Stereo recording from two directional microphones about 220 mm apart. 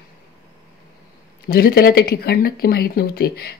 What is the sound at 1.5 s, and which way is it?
Speech, 45° left (ahead or behind).